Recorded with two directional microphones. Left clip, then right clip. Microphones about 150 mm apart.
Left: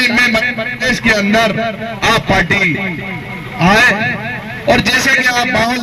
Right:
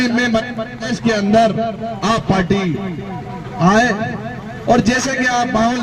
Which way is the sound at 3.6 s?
25° left (ahead or behind).